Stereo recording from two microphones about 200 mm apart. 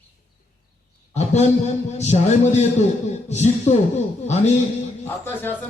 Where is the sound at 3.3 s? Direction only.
35° left (ahead or behind).